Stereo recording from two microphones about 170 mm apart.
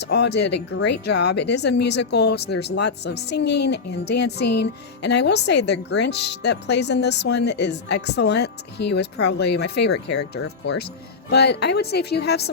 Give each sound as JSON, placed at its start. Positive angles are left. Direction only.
{"t": 0.0, "sound": "speech", "side_deg": 75}